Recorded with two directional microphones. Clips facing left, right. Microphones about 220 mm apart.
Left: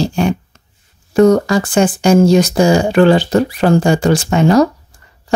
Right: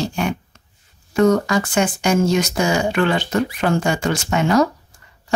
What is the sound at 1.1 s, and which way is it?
Speech, 35° left (ahead or behind).